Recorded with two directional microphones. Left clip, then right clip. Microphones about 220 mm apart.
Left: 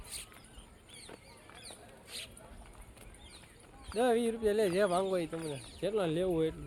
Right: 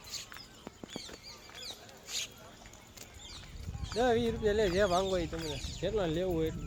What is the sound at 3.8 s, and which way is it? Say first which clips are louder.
Speech: even; 10° left (ahead or behind).